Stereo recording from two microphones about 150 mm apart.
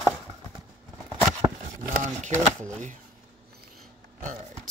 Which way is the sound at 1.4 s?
25° right (ahead or behind).